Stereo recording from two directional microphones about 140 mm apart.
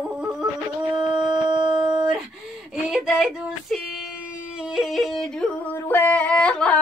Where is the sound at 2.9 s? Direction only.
5° right (ahead or behind).